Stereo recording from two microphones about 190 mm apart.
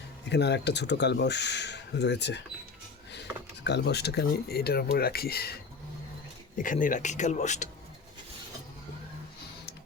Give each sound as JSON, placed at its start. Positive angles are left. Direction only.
{"t": 0.3, "sound": "speech", "side_deg": 65}
{"t": 6.6, "sound": "speech", "side_deg": 45}